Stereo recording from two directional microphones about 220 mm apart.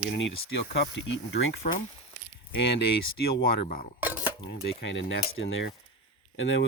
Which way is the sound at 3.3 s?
45° left (ahead or behind).